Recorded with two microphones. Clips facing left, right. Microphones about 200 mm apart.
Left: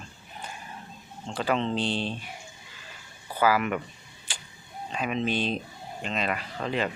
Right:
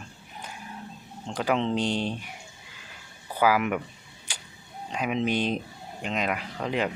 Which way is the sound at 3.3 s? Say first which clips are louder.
Right 1 dB; 10° right (ahead or behind).